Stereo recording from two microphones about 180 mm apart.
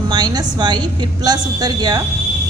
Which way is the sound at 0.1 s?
20° right (ahead or behind).